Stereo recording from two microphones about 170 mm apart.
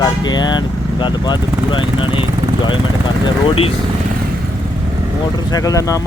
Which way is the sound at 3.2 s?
35° left (ahead or behind).